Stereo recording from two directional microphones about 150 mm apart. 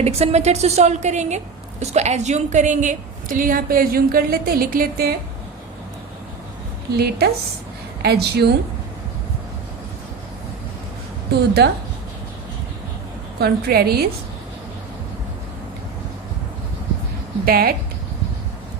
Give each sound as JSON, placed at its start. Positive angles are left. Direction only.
{"t": 0.0, "sound": "a woman's voice", "side_deg": -40}
{"t": 6.9, "sound": "a woman's voice", "side_deg": -90}
{"t": 13.4, "sound": "a woman's voice", "side_deg": -90}
{"t": 17.4, "sound": "speech", "side_deg": -90}